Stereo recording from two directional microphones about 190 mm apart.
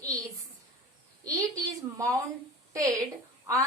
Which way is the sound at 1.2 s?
15° right (ahead or behind).